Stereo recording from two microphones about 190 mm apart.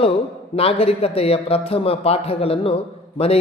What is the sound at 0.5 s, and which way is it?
A man's voice, 30° left (ahead or behind).